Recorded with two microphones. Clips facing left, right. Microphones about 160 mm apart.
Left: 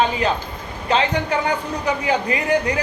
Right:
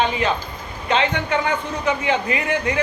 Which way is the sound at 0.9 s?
35° left (ahead or behind).